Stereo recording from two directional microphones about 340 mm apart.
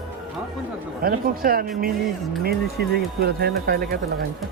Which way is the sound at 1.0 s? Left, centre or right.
Right.